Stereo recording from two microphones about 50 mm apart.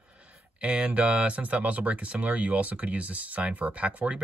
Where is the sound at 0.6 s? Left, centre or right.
Right.